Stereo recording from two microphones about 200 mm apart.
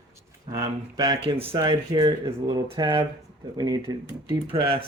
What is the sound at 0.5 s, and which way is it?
Speech, 20° right (ahead or behind).